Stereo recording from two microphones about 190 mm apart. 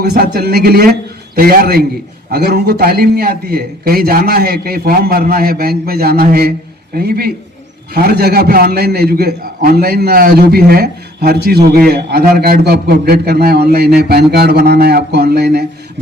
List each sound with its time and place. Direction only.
0.0 s a man's voice: 55° right (ahead or behind)